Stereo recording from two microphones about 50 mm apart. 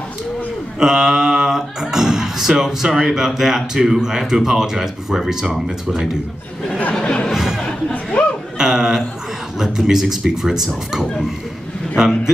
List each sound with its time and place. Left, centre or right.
0.7 s speech: centre
6.9 s a sound: centre
7.3 s chatter: centre
7.9 s chatter: left
8.5 s speech: centre